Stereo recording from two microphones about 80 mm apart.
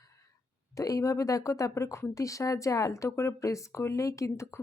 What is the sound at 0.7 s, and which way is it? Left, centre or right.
Speech, left.